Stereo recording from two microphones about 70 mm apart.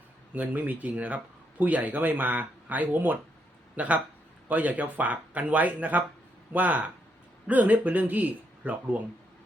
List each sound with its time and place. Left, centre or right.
0.3 s speech: right